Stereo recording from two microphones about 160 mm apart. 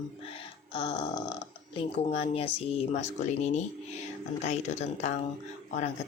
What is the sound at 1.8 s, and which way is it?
Speech, 40° left (ahead or behind).